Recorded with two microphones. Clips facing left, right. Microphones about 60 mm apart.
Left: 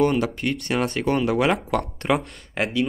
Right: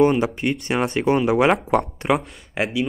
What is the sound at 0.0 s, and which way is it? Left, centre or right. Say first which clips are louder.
Speech: right 3 dB; centre.